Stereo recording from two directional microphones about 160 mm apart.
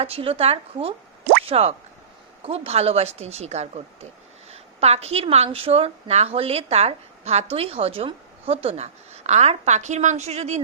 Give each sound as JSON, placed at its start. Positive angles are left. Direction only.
{"t": 0.0, "sound": "a woman's voice", "side_deg": -35}